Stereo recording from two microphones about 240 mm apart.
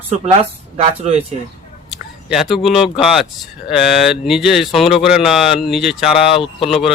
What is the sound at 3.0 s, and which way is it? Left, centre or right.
Speech, centre.